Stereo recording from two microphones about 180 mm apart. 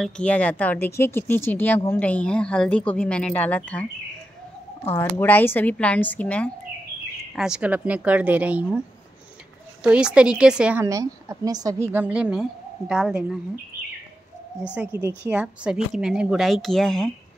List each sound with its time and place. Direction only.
0.0 s speech: 5° left (ahead or behind)
4.9 s speech: 10° left (ahead or behind)
7.3 s a woman's voice: 5° right (ahead or behind)
9.8 s a woman's voice: 5° right (ahead or behind)
10.9 s a woman's voice: 20° right (ahead or behind); by 13.4 s 5° right (ahead or behind)
14.7 s speech: 10° right (ahead or behind)